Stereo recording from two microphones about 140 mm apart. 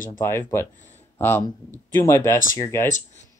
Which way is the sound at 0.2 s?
20° left (ahead or behind).